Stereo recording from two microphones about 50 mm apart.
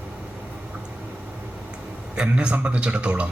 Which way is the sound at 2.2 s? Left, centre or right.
Centre.